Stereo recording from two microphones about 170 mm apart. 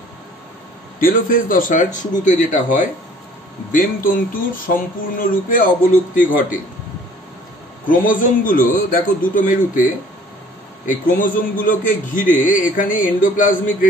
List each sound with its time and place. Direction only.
0.9 s speech: 55° left (ahead or behind)
7.8 s speech: 50° left (ahead or behind)
10.9 s speech: 55° left (ahead or behind)